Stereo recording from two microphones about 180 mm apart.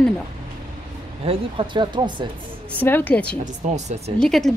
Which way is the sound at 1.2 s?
30° right (ahead or behind).